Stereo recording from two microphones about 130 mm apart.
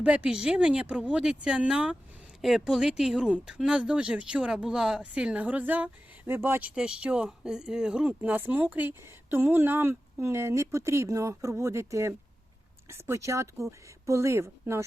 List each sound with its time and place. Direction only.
0.0 s speech: 10° right (ahead or behind)